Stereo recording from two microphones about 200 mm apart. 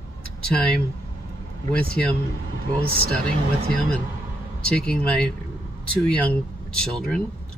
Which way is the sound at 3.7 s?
5° left (ahead or behind).